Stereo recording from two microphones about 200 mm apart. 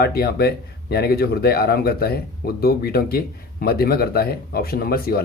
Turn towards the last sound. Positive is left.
turn(degrees=50)  # may be behind; listen again after turning